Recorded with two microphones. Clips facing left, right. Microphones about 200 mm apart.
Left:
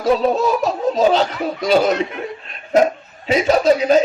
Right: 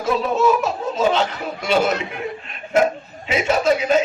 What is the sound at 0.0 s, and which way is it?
A man's voice, 35° left (ahead or behind).